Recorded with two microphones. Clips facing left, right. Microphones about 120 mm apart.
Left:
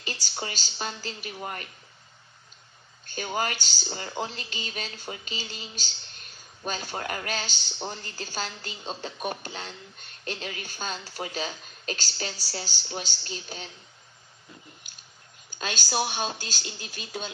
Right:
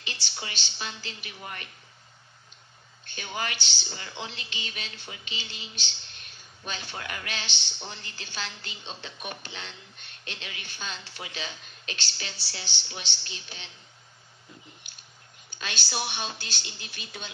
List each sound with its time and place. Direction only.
0.0 s speech: 40° left (ahead or behind)
3.1 s speech: 40° left (ahead or behind)
15.5 s speech: 45° left (ahead or behind)